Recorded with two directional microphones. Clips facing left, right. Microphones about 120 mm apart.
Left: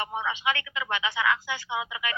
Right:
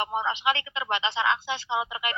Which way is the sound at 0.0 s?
20° right (ahead or behind).